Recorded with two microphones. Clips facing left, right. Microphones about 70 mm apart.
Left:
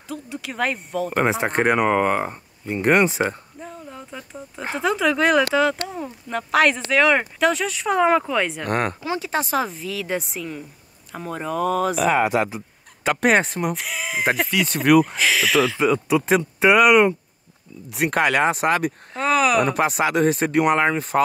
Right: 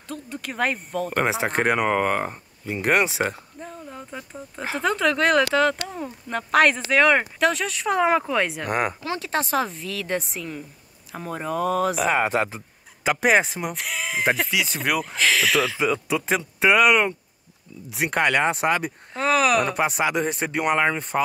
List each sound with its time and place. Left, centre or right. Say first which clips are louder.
0.1 s speech: left 2 dB; centre
12.3 s speech: left 2 dB; right
13.0 s speech: left 1 dB; centre